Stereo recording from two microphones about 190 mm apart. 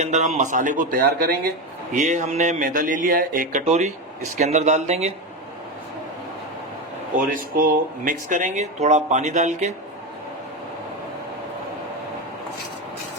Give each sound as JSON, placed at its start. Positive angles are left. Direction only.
{"t": 0.0, "sound": "speech", "side_deg": -40}
{"t": 7.2, "sound": "speech", "side_deg": -45}